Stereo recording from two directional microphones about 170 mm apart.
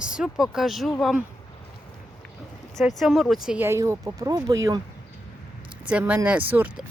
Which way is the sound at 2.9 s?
Centre (ahead or behind).